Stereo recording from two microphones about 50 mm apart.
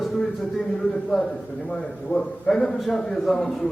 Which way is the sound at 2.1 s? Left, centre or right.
Left.